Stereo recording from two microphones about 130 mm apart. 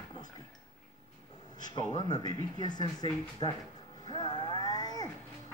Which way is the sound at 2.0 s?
30° left (ahead or behind).